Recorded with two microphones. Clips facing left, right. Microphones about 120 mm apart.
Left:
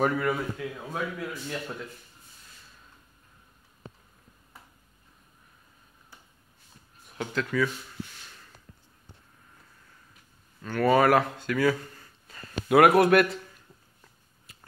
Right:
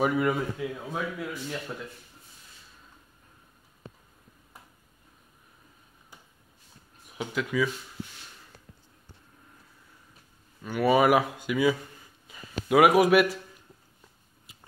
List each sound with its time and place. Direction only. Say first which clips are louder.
0.2 s a man's voice: right 2 dB; 20° right (ahead or behind)
0.7 s speech: even; centre (ahead or behind)
7.1 s speech: left 1 dB; 10° right (ahead or behind)
10.6 s speech: even; 10° right (ahead or behind)